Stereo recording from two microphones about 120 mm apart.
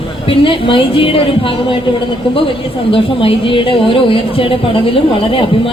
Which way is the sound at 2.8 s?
50° left (ahead or behind).